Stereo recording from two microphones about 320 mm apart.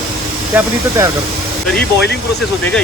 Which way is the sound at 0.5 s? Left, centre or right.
Centre.